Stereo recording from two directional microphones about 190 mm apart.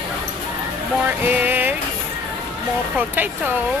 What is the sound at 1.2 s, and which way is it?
Speech, 10° right (ahead or behind).